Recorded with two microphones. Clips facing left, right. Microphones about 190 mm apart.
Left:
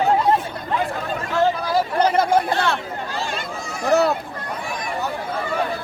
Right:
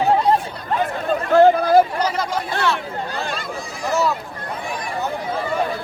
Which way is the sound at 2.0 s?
55° left (ahead or behind).